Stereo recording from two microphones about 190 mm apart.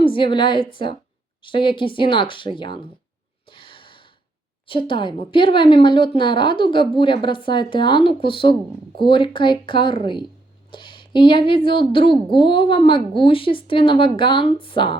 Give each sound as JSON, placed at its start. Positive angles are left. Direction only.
{"t": 0.0, "sound": "a woman's voice", "side_deg": 25}
{"t": 3.5, "sound": "a sound", "side_deg": 25}
{"t": 4.6, "sound": "a woman's voice", "side_deg": 25}